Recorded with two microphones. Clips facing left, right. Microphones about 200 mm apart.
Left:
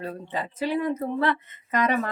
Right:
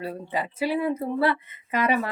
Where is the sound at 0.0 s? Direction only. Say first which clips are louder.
Right 2 dB; 10° right (ahead or behind).